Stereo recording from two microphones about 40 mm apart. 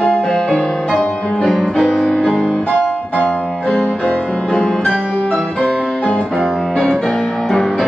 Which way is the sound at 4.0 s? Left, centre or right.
Left.